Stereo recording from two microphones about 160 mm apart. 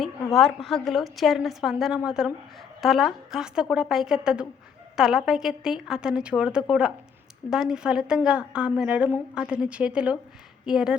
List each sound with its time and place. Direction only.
0.0 s a woman's voice: centre (ahead or behind)